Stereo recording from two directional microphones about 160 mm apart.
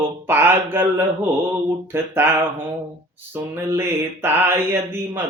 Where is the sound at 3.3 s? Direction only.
15° right (ahead or behind).